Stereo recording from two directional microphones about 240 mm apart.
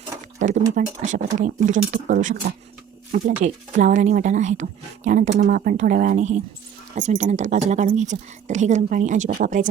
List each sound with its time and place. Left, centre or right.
0.3 s speech: right